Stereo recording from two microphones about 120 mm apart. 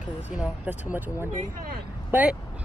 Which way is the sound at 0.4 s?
15° right (ahead or behind).